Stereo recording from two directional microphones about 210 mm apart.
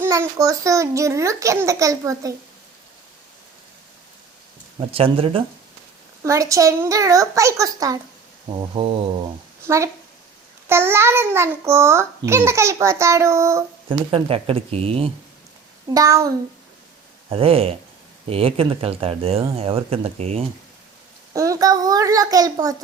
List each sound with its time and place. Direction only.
0.0 s a child's voice: 15° right (ahead or behind)
4.9 s speech: 25° right (ahead or behind)
6.2 s a child's voice: 15° right (ahead or behind)
8.5 s speech: 25° right (ahead or behind)
9.6 s a child's voice: 15° right (ahead or behind)
14.1 s speech: 25° right (ahead or behind)
15.9 s a child's voice: 15° right (ahead or behind)
17.2 s speech: 25° right (ahead or behind)
21.3 s a child's voice: 15° right (ahead or behind)